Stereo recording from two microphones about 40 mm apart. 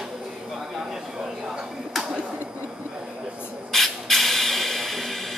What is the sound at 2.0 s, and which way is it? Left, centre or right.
Tick-tock, right.